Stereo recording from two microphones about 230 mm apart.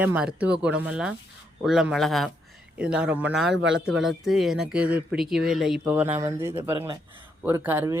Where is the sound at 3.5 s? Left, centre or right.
Right.